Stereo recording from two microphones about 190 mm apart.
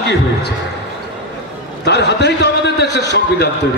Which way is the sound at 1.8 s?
65° left (ahead or behind).